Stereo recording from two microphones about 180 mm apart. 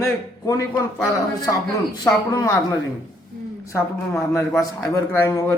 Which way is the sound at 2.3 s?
15° left (ahead or behind).